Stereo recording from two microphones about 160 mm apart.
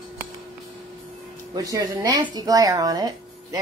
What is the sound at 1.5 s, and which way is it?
A woman's voice, 20° right (ahead or behind).